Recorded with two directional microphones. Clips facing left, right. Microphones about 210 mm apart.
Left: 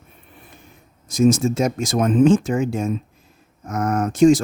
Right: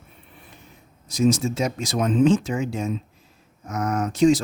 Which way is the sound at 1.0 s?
50° left (ahead or behind).